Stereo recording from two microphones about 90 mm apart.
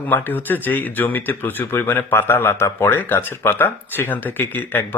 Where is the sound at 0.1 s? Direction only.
20° left (ahead or behind).